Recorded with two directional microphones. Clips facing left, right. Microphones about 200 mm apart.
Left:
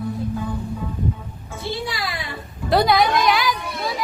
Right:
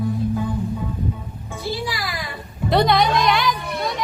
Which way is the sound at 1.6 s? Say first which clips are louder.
Even; 25° left (ahead or behind).